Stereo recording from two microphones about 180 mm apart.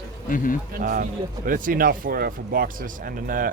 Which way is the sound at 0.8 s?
50° right (ahead or behind).